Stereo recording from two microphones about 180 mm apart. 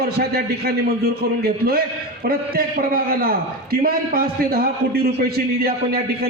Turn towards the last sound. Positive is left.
turn(degrees=-60)  # may be behind; listen again after turning